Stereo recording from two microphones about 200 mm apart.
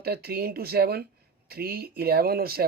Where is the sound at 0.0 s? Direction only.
50° right (ahead or behind).